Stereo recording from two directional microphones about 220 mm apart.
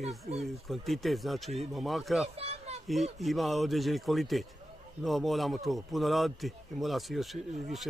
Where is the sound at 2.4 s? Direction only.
25° right (ahead or behind).